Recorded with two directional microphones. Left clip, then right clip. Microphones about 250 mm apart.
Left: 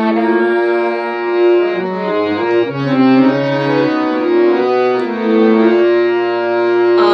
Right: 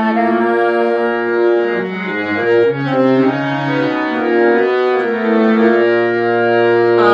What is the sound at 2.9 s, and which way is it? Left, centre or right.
Music, left.